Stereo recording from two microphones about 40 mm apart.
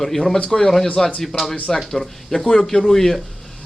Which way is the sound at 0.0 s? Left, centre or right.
Centre.